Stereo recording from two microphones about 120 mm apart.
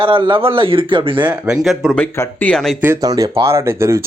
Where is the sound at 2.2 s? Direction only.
15° left (ahead or behind).